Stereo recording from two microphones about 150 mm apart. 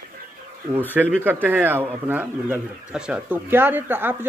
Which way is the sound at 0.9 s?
10° right (ahead or behind).